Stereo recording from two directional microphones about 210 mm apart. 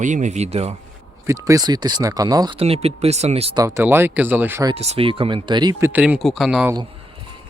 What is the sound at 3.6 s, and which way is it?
Speech, 10° right (ahead or behind).